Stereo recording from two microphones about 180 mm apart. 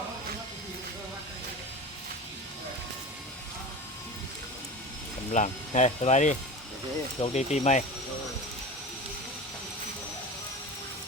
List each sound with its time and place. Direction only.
5.3 s speech: 40° left (ahead or behind)